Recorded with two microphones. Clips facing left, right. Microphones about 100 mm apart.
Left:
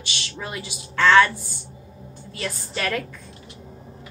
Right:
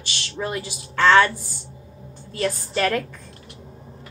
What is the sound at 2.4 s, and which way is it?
Speech, 35° right (ahead or behind).